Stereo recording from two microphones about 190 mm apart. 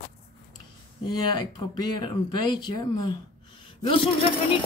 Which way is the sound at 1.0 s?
25° left (ahead or behind).